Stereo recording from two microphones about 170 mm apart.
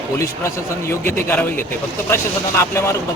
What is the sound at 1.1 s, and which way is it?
Speech, 15° left (ahead or behind).